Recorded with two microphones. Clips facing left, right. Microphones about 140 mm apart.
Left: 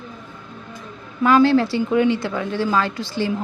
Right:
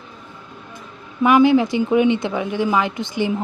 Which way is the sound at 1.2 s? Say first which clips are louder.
Right 1 dB; 15° right (ahead or behind).